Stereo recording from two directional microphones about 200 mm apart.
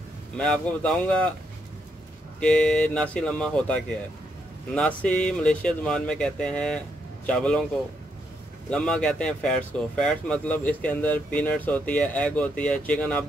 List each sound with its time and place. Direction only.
0.4 s speech: 5° left (ahead or behind)
2.4 s speech: 5° left (ahead or behind)
8.6 s speech: 5° left (ahead or behind)